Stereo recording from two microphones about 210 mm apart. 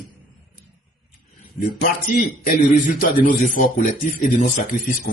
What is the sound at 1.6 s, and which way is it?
A man's voice, 40° left (ahead or behind).